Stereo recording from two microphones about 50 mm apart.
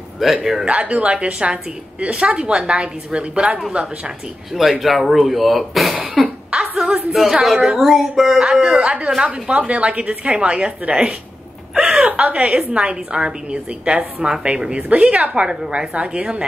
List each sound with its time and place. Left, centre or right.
0.2 s speech: centre
0.7 s a woman's voice: right
4.6 s speech: centre
6.2 s cough: centre
6.5 s a sound: centre
7.1 s a woman's voice: centre
11.7 s a sound: centre
12.1 s a woman's voice: right